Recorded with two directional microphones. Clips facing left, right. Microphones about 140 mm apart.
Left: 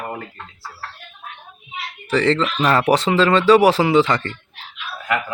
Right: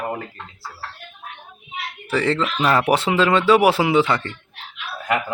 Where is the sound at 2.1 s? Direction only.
10° right (ahead or behind).